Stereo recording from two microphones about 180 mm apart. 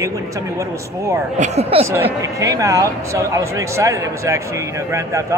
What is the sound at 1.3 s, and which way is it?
Speech, 40° right (ahead or behind).